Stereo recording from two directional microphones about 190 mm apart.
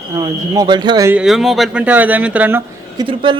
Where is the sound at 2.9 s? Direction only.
25° right (ahead or behind).